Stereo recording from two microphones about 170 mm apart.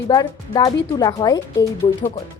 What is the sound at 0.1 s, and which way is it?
Speech, 20° left (ahead or behind).